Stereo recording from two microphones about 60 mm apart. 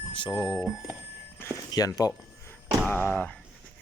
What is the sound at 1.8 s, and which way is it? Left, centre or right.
Speech, left.